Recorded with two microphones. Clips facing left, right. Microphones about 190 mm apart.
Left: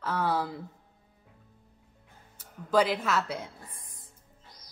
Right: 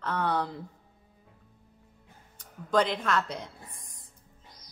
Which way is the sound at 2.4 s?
5° left (ahead or behind).